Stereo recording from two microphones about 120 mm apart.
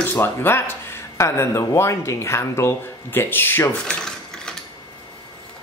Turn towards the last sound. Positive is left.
turn(degrees=5)  # may be behind; listen again after turning